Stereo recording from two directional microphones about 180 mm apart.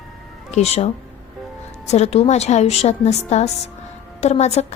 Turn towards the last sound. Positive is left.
turn(degrees=40)  # may be behind; listen again after turning